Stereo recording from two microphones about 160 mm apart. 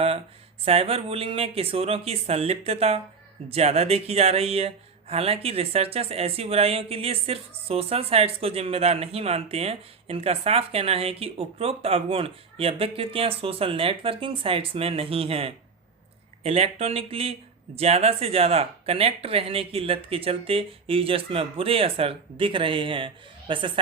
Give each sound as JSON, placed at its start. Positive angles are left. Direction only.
{"t": 0.6, "sound": "speech", "side_deg": -40}